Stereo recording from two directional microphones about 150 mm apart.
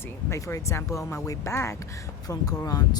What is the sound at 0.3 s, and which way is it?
Speech, 20° left (ahead or behind).